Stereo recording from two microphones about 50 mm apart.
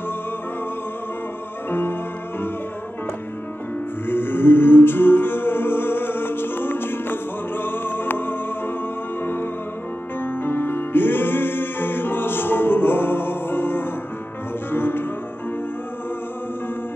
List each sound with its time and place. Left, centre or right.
1.7 s music: left
4.0 s music: left